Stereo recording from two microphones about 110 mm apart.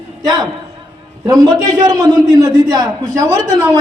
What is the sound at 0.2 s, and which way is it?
A man's voice, 35° right (ahead or behind).